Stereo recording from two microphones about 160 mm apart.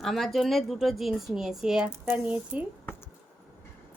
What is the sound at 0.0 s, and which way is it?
Speech, centre (ahead or behind).